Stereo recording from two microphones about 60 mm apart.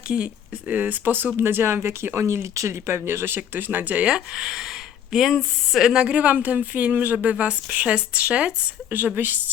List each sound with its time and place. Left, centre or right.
0.1 s speech: centre
0.7 s speech: right
4.0 s speech: centre
9.0 s speech: right